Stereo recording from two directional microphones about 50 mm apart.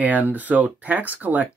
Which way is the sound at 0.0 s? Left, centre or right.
Right.